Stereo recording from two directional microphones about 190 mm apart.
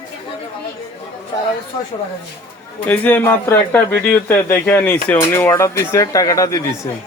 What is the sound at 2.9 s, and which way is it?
A man's voice, 10° left (ahead or behind).